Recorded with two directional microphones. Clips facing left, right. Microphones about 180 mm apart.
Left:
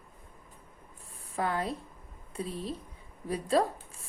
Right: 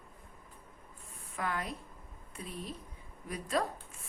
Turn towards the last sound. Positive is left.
turn(degrees=30)  # may be behind; listen again after turning